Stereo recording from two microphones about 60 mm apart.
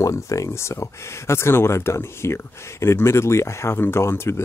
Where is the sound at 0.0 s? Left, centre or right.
Left.